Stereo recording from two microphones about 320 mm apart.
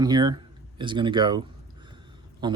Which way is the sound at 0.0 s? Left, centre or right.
Centre.